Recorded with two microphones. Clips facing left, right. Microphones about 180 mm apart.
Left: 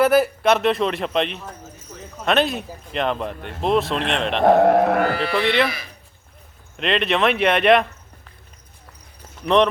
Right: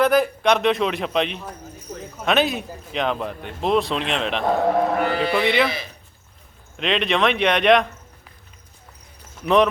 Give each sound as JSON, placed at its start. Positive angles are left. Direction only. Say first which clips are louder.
{"t": 0.0, "sound": "speech", "louder": "left 1 dB", "side_deg": 5}
{"t": 4.4, "sound": "speech", "louder": "left 6 dB", "side_deg": 70}
{"t": 5.4, "sound": "speech", "louder": "left 1 dB", "side_deg": 0}
{"t": 6.7, "sound": "speech", "louder": "left 1 dB", "side_deg": 0}
{"t": 9.4, "sound": "speech", "louder": "even", "side_deg": 0}